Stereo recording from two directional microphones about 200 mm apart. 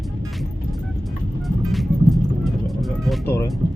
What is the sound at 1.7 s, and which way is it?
Music, centre (ahead or behind).